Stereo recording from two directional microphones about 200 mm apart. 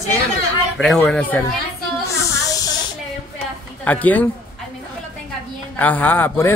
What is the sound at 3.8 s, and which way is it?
Speech, 10° left (ahead or behind).